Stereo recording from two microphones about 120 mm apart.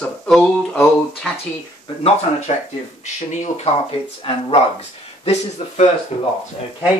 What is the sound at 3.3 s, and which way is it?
Speech, 65° left (ahead or behind).